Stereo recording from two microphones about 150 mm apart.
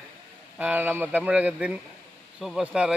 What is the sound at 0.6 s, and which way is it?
A man's voice, 10° right (ahead or behind).